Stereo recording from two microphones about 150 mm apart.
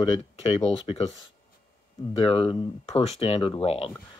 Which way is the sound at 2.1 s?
35° left (ahead or behind).